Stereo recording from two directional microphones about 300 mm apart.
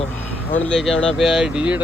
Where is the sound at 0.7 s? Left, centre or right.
Centre.